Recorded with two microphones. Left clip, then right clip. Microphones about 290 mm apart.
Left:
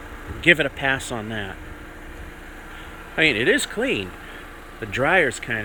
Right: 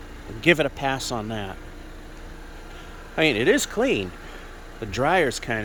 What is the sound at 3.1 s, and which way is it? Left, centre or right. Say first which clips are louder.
Speech: left 1 dB; centre.